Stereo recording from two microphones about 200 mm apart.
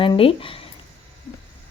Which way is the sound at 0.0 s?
25° left (ahead or behind).